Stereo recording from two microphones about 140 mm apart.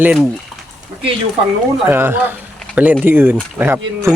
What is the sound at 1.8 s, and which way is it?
Speech, 15° right (ahead or behind).